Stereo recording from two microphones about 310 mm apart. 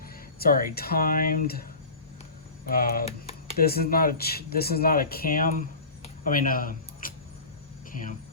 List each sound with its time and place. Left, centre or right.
0.3 s speech: left
2.6 s speech: left